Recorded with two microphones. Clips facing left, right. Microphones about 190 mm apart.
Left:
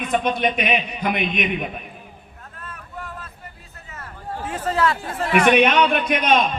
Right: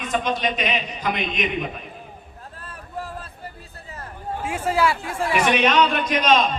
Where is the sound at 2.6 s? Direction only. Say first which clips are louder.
Right 3 dB; 30° right (ahead or behind).